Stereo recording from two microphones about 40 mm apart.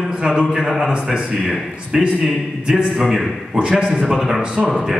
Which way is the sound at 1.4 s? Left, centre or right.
Centre.